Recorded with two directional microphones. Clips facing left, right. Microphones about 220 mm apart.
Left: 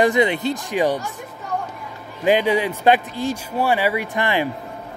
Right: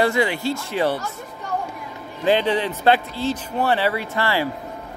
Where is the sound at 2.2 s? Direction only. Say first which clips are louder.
Left 2 dB; 15° left (ahead or behind).